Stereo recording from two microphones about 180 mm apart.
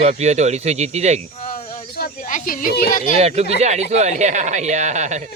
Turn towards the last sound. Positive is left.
turn(degrees=-40)  # may be behind; listen again after turning